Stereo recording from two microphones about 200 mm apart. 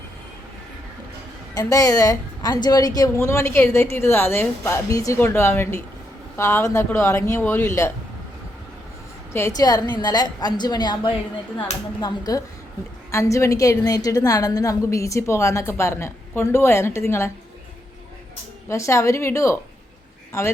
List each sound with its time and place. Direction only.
1.5 s a woman's voice: 15° left (ahead or behind)
9.6 s a woman's voice: 20° left (ahead or behind)
18.7 s a woman's voice: 15° left (ahead or behind)